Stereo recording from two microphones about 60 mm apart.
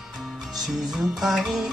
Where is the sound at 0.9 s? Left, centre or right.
Centre.